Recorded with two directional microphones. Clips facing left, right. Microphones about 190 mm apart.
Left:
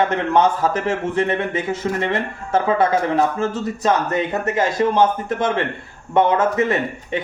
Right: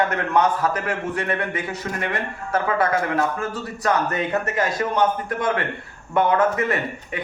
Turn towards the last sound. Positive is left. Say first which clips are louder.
# left 3 dB
turn(degrees=25)  # may be behind; listen again after turning